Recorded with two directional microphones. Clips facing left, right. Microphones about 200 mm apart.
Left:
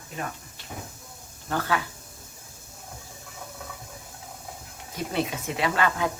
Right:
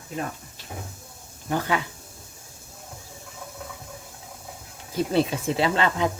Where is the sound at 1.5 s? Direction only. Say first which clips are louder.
Right 2 dB; 15° right (ahead or behind).